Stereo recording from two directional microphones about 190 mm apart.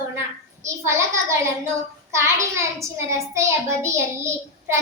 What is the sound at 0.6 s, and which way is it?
A child's voice, 15° right (ahead or behind).